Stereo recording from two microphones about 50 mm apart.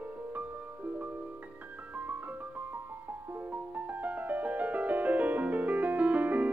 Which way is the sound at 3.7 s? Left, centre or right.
Right.